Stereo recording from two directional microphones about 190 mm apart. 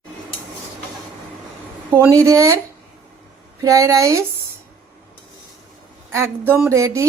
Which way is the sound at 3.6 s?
15° right (ahead or behind).